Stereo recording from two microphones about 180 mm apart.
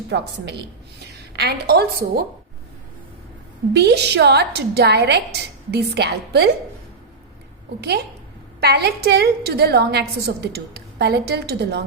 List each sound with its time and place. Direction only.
0.1 s a woman's voice: 70° right (ahead or behind)
3.7 s a woman's voice: 70° right (ahead or behind)
8.6 s a woman's voice: 60° right (ahead or behind)